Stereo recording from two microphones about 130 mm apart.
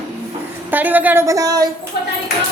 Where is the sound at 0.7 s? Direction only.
15° right (ahead or behind); by 1.7 s 30° right (ahead or behind).